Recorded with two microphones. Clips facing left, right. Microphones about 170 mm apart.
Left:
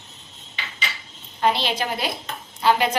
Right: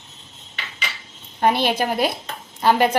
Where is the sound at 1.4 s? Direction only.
50° right (ahead or behind).